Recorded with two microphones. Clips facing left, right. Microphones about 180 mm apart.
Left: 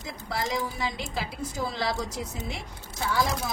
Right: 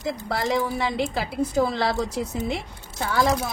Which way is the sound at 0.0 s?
65° right (ahead or behind).